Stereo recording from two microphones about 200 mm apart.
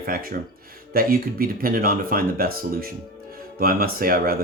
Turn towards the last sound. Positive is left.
turn(degrees=-50)  # may be behind; listen again after turning